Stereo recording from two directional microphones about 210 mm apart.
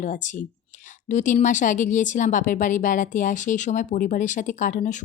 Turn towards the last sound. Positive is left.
turn(degrees=40)  # may be behind; listen again after turning